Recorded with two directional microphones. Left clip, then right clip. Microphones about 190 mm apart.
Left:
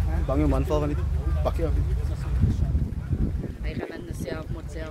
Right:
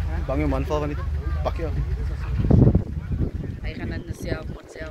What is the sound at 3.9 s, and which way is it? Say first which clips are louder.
Speech: right 2 dB; 15° left (ahead or behind).